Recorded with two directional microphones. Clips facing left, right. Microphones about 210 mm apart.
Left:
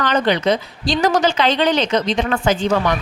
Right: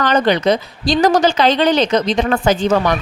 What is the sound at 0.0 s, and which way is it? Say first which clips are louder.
Speech: right 3 dB; 40° right (ahead or behind).